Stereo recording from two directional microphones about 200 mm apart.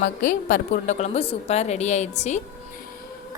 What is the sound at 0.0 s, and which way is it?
A woman's voice, 45° left (ahead or behind).